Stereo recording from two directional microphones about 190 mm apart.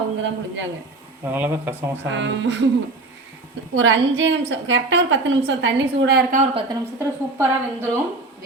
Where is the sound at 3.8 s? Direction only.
75° right (ahead or behind); by 6.4 s 50° right (ahead or behind).